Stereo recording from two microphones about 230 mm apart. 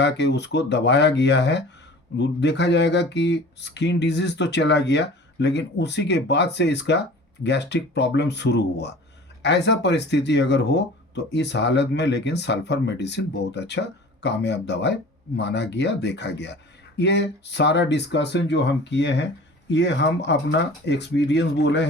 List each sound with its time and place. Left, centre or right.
0.0 s speech: left